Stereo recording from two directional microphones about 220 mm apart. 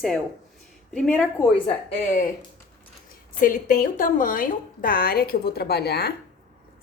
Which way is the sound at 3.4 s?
35° left (ahead or behind).